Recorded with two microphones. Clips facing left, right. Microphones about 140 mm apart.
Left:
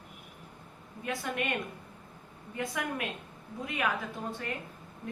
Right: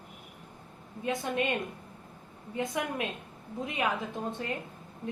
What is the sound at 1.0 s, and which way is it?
Speech, 20° right (ahead or behind).